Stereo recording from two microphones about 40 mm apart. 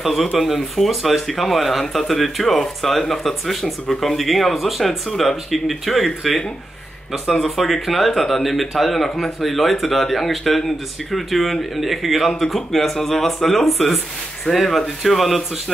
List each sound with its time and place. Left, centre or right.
0.0 s speech: centre